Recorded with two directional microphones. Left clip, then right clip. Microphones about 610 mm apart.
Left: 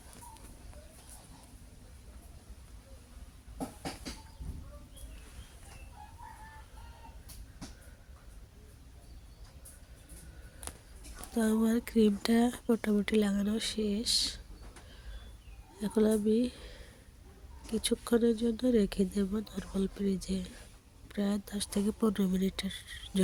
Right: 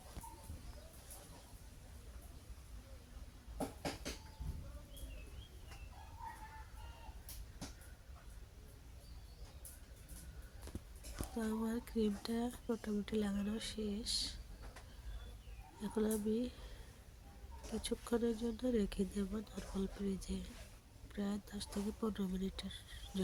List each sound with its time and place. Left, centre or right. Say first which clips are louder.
11.3 s speech: left 11 dB; centre
15.8 s speech: left 10 dB; centre
17.7 s speech: left 9 dB; right